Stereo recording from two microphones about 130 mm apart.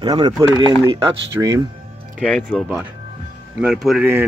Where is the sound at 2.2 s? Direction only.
5° left (ahead or behind).